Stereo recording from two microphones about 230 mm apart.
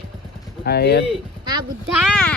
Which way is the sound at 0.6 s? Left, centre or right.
Left.